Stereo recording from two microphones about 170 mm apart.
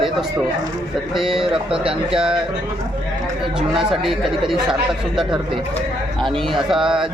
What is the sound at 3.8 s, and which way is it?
Speech, centre (ahead or behind).